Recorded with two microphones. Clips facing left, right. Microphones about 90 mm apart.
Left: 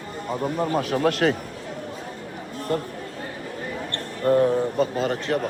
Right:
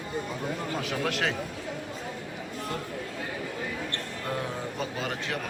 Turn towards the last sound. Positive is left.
turn(degrees=40)  # may be behind; listen again after turning